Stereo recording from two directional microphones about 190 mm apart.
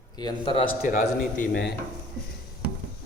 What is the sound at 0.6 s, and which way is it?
Speech, 45° left (ahead or behind).